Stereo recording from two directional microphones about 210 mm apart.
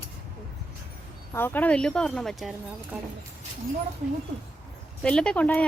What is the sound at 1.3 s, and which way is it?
A woman's voice, 10° left (ahead or behind).